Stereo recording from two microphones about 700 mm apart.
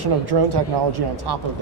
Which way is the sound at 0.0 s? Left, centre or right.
Right.